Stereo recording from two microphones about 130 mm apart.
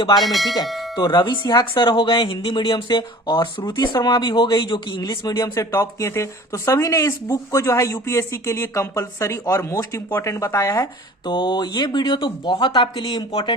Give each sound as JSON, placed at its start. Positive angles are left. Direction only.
{"t": 0.2, "sound": "speech", "side_deg": 0}
{"t": 0.9, "sound": "speech", "side_deg": 35}
{"t": 11.3, "sound": "speech", "side_deg": 35}